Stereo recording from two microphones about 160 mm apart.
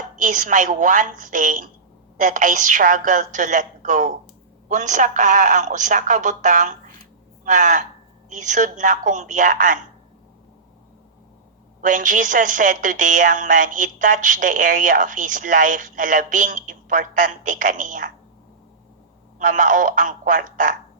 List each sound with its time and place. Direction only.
0.2 s a woman's voice: 55° right (ahead or behind)
11.8 s a woman's voice: 55° right (ahead or behind)
19.4 s a woman's voice: 55° right (ahead or behind)